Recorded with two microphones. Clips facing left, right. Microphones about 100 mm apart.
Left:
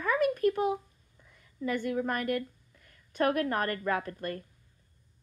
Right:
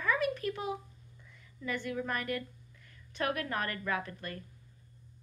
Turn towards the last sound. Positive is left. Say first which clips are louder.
# left 4 dB
turn(degrees=40)  # may be behind; listen again after turning